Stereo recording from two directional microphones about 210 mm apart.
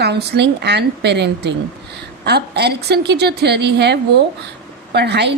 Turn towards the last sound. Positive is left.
turn(degrees=-55)  # may be behind; listen again after turning